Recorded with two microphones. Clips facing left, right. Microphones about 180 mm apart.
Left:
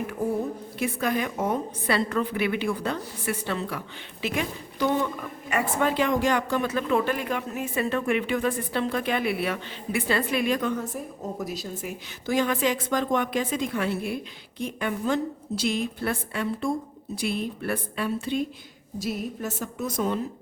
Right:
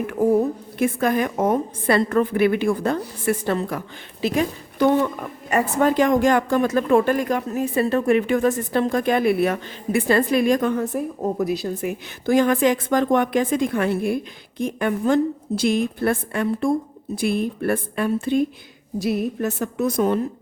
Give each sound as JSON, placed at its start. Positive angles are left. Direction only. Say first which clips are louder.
{"t": 0.8, "sound": "speech", "louder": "right 6 dB", "side_deg": -50}
{"t": 4.8, "sound": "a woman's voice", "louder": "right 7 dB", "side_deg": -60}
{"t": 5.5, "sound": "speech", "louder": "right 6 dB", "side_deg": -40}
{"t": 19.0, "sound": "a woman's voice", "louder": "right 8 dB", "side_deg": -65}